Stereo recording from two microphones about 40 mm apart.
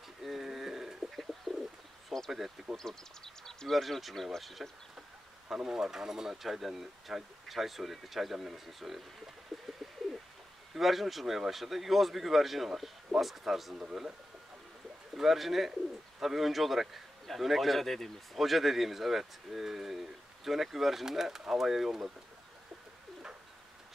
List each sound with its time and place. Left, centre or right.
0.2 s a sound: centre
1.5 s bird: centre
2.3 s a man's voice: centre
2.8 s a man's voice: centre
9.5 s bird: centre
10.7 s a man's voice: centre
13.7 s speech: centre
15.1 s a man's voice: centre